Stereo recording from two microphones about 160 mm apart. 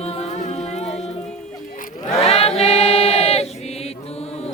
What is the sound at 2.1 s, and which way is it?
Choir, 40° left (ahead or behind).